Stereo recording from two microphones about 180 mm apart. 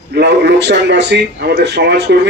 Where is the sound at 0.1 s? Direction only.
65° right (ahead or behind).